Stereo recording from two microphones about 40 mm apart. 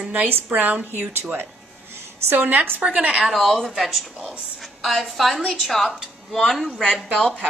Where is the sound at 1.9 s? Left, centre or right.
Right.